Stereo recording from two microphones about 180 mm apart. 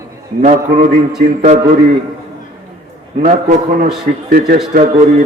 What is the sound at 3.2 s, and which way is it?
A man's voice, 45° right (ahead or behind).